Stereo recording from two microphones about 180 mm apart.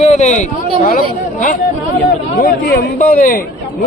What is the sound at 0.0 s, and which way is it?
Speech, 40° left (ahead or behind).